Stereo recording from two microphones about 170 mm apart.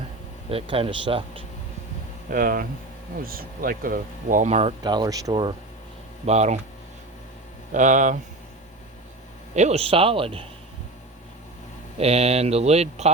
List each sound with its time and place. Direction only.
0.5 s speech: 30° right (ahead or behind)
2.3 s speech: 60° right (ahead or behind); by 4.7 s 40° right (ahead or behind)
4.8 s speech: 25° right (ahead or behind)
6.2 s speech: 40° right (ahead or behind)
7.7 s speech: 50° right (ahead or behind)
9.6 s speech: 40° right (ahead or behind)
11.9 s speech: 35° right (ahead or behind)